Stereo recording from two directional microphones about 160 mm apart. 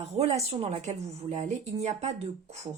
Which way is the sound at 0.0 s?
40° right (ahead or behind).